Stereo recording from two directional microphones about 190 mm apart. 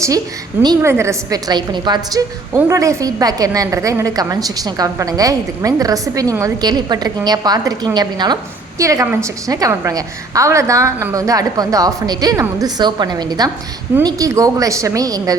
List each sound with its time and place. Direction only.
0.6 s a woman's voice: 15° right (ahead or behind)